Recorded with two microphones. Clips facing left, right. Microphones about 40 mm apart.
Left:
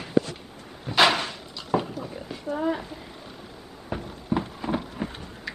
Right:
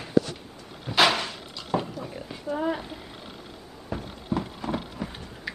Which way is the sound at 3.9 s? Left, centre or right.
Left.